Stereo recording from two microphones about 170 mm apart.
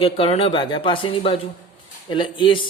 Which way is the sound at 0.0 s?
35° left (ahead or behind).